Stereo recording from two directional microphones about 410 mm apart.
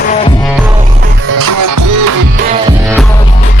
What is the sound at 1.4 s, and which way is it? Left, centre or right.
Music, right.